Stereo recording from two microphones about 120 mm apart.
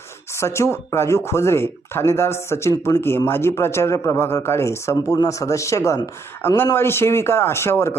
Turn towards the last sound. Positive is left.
turn(degrees=20)  # may be behind; listen again after turning